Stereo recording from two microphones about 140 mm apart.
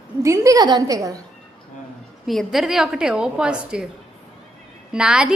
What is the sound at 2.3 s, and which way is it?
A woman's voice, centre (ahead or behind).